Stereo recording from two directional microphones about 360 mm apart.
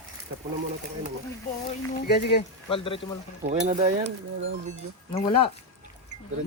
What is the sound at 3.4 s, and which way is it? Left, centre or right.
Stir, centre.